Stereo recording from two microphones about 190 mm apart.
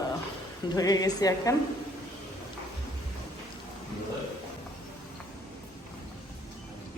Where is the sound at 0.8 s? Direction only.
20° left (ahead or behind).